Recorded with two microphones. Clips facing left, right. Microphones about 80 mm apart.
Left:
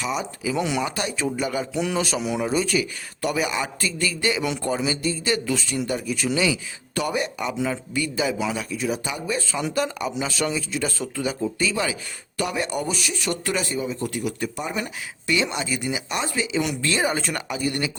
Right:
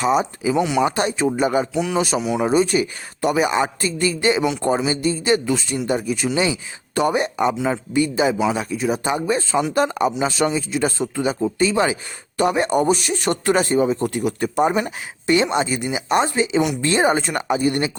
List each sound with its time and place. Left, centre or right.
0.0 s speech: right
0.6 s speech: centre
0.9 s speech: right
1.7 s speech: centre
2.0 s speech: centre
2.6 s a man's voice: right
3.3 s a man's voice: right
10.8 s a man's voice: right
11.1 s a man's voice: right